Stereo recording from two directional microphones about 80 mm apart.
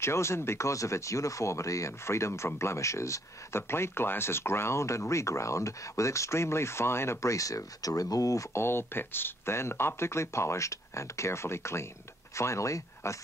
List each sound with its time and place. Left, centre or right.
0.0 s speech: left